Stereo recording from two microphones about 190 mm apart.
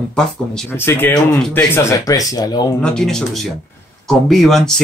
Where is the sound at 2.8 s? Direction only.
5° left (ahead or behind).